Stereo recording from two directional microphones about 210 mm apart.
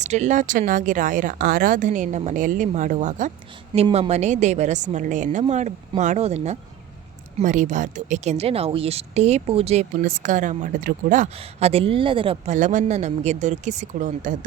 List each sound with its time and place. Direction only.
0.0 s a woman's voice: 35° right (ahead or behind)
10.0 s a woman's voice: 40° right (ahead or behind)